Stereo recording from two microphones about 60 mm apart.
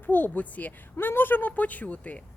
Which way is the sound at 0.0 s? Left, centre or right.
Left.